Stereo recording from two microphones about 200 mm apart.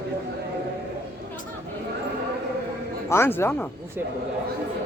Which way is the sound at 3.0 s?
10° left (ahead or behind).